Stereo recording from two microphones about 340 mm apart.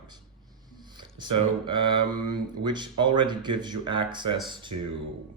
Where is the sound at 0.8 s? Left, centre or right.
Centre.